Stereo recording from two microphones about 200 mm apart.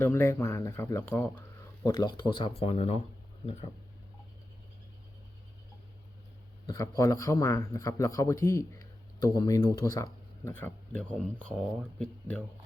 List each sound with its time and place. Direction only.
0.0 s speech: 10° left (ahead or behind); by 3.7 s 30° left (ahead or behind)
6.7 s speech: 20° left (ahead or behind)